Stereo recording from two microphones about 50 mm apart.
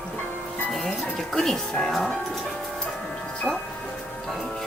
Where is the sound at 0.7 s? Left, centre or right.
Centre.